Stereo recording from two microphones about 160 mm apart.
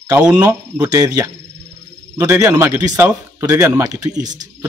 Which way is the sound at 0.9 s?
25° right (ahead or behind).